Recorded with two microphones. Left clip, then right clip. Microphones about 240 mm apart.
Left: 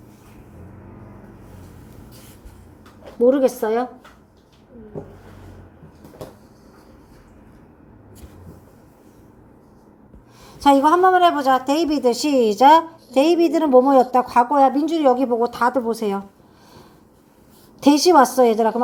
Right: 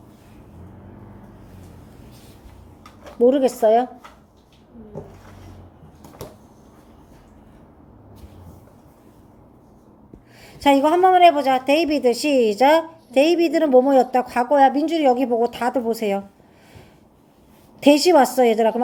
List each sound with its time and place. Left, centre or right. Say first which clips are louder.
3.2 s a woman's voice: even; left
10.4 s a woman's voice: left 2 dB; left
12.3 s a woman's voice: even; centre
12.5 s a woman's voice: left 4 dB; left
17.8 s a woman's voice: left 1 dB; left